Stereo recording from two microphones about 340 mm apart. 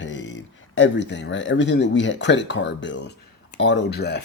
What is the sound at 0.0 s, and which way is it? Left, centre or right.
Speech, left.